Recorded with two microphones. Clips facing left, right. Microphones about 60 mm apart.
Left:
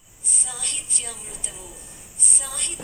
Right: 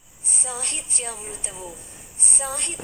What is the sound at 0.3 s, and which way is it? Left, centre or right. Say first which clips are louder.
A woman's voice: right 4 dB; right.